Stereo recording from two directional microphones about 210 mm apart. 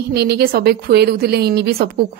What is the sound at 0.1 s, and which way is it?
A woman's voice, 50° right (ahead or behind).